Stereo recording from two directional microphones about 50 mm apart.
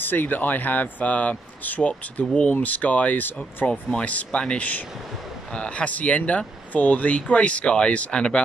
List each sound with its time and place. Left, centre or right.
0.0 s speech: left
4.0 s speech: left